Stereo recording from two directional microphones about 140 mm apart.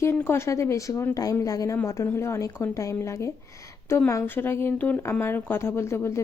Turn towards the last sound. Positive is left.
turn(degrees=20)  # may be behind; listen again after turning